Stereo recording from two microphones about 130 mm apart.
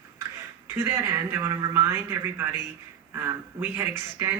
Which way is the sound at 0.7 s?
20° right (ahead or behind).